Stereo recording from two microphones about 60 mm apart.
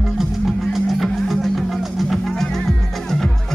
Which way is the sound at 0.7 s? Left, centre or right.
Centre.